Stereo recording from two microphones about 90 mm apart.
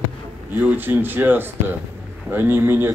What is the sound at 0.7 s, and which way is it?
A man's voice, 20° right (ahead or behind).